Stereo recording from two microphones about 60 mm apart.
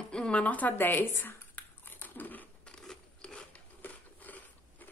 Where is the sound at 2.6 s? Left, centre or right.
Centre.